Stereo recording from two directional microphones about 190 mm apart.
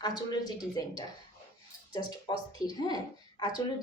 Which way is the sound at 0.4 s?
20° left (ahead or behind).